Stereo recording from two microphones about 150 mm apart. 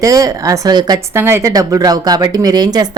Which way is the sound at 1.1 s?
15° right (ahead or behind).